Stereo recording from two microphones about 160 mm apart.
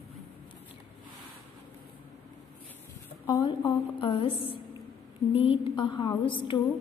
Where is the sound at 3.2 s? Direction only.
25° left (ahead or behind).